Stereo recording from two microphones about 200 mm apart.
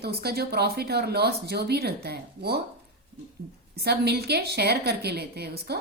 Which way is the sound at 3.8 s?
55° right (ahead or behind).